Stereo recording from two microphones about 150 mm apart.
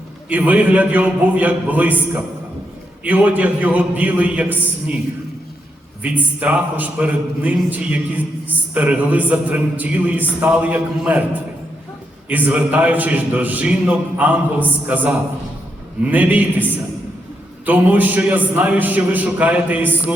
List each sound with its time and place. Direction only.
0.3 s a man's voice: 10° right (ahead or behind)
6.0 s a man's voice: 10° right (ahead or behind)
12.3 s a man's voice: 10° right (ahead or behind)